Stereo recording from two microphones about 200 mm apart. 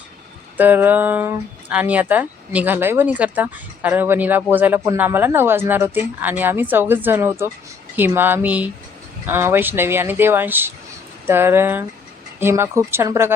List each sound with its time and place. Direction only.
0.5 s speech: 10° right (ahead or behind)